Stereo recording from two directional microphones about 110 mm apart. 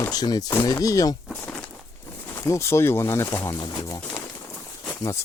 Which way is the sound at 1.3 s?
20° left (ahead or behind).